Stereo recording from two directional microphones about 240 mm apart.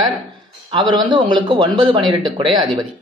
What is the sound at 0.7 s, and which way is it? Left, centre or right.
A man's voice, centre.